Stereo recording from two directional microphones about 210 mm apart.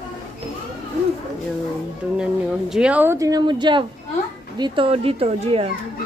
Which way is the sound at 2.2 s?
5° right (ahead or behind).